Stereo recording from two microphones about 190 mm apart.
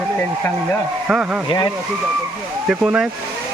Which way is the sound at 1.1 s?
5° right (ahead or behind).